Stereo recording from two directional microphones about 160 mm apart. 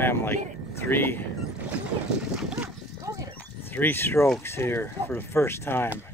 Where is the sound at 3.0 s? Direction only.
20° right (ahead or behind).